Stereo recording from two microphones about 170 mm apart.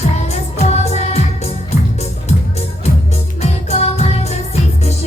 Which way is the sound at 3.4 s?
40° left (ahead or behind).